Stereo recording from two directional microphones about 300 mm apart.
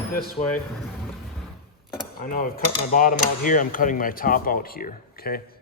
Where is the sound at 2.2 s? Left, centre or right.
Left.